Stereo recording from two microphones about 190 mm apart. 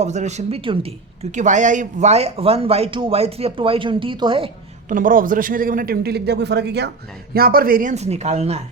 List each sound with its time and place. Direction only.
0.0 s speech: 35° right (ahead or behind)
4.9 s a man's voice: 45° right (ahead or behind)